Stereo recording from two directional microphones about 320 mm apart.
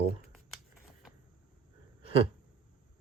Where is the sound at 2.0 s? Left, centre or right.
Centre.